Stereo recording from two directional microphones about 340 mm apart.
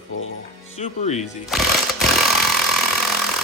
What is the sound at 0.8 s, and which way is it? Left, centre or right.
Speech, centre.